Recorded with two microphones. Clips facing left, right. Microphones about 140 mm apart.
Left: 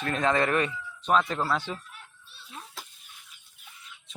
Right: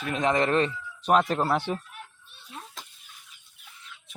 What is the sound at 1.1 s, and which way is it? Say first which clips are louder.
Speech: right 3 dB; 45° right (ahead or behind).